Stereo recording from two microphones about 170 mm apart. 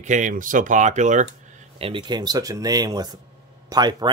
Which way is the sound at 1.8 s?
30° right (ahead or behind).